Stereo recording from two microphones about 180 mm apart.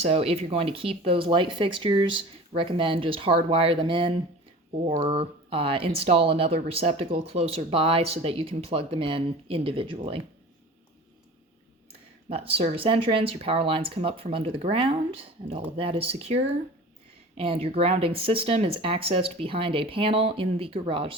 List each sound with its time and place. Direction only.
0.0 s speech: 35° right (ahead or behind)
12.3 s speech: 30° right (ahead or behind)